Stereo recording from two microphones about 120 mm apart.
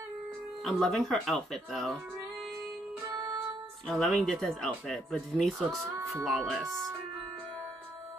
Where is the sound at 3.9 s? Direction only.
5° left (ahead or behind).